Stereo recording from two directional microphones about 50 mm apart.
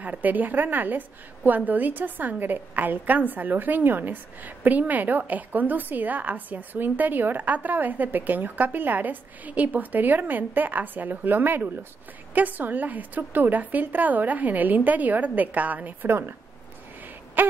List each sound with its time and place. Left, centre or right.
0.0 s a woman's voice: right
16.1 s speech: right
17.4 s a sound: right